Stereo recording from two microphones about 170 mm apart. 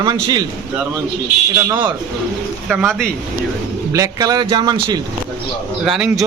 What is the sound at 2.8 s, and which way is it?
Speech, centre (ahead or behind).